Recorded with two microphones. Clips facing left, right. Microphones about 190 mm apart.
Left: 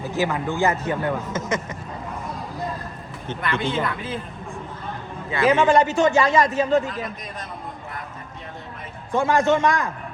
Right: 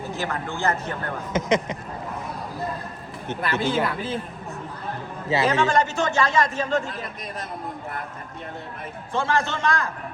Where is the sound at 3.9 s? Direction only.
30° right (ahead or behind).